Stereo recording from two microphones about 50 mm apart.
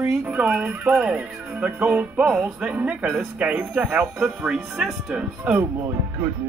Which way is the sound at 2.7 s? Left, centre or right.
Right.